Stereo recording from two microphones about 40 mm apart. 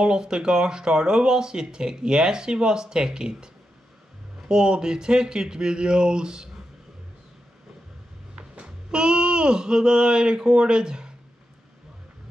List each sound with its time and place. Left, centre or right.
0.0 s speech: centre
4.5 s speech: right
8.4 s a sound: right